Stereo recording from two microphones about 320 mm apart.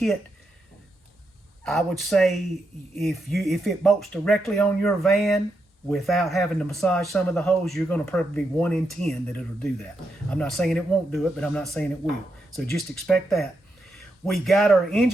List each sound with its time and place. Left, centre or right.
1.6 s speech: centre